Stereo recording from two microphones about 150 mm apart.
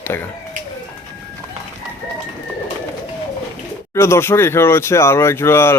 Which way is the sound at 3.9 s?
20° left (ahead or behind).